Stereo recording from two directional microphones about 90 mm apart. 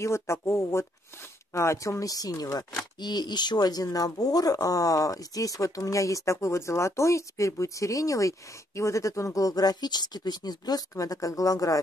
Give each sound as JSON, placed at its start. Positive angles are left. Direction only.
{"t": 0.0, "sound": "speech", "side_deg": 30}